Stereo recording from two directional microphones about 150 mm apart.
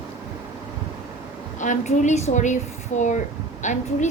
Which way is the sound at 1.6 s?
55° left (ahead or behind).